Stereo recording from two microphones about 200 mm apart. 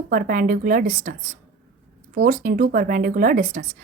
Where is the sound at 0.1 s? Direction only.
40° right (ahead or behind).